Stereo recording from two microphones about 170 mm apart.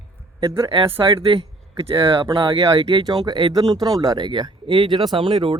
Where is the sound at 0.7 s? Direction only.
30° right (ahead or behind).